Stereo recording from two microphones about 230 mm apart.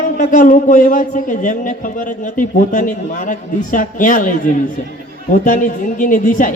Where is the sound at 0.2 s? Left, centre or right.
Left.